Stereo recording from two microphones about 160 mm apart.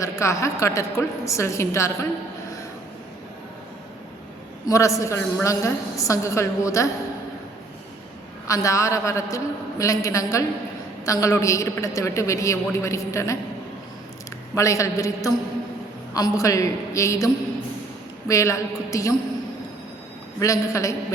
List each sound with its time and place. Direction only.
0.0 s a woman's voice: 20° left (ahead or behind)
4.6 s a woman's voice: 20° left (ahead or behind)
8.4 s a woman's voice: 20° left (ahead or behind)
14.5 s a woman's voice: 20° left (ahead or behind)
18.3 s a woman's voice: 20° left (ahead or behind)
20.4 s a woman's voice: 20° left (ahead or behind)